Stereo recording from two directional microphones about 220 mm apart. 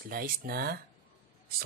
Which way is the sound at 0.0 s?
40° right (ahead or behind).